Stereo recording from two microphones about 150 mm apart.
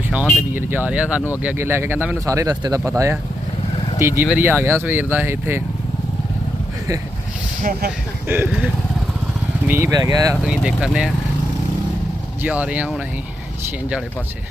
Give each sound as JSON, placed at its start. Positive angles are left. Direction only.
{"t": 0.5, "sound": "speech", "side_deg": -10}
{"t": 7.6, "sound": "speech", "side_deg": -70}
{"t": 8.3, "sound": "speech", "side_deg": -10}
{"t": 9.6, "sound": "speech", "side_deg": -15}
{"t": 10.4, "sound": "speech", "side_deg": -5}
{"t": 12.4, "sound": "speech", "side_deg": -10}